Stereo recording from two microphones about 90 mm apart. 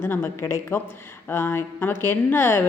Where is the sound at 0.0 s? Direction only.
25° left (ahead or behind).